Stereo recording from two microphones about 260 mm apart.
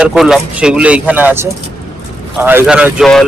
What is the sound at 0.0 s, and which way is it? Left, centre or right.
Speech, centre.